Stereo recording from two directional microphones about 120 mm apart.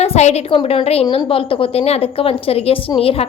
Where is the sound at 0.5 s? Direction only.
50° left (ahead or behind).